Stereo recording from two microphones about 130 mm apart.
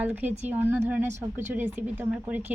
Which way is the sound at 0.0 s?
10° right (ahead or behind).